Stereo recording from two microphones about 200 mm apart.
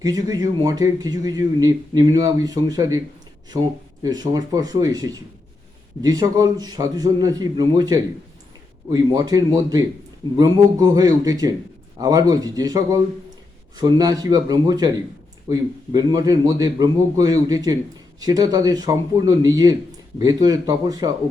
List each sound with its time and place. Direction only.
0.0 s speech: 20° right (ahead or behind)
4.0 s a man's voice: 20° right (ahead or behind)